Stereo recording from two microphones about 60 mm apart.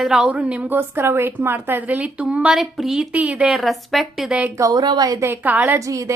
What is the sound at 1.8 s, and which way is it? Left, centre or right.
Speech, right.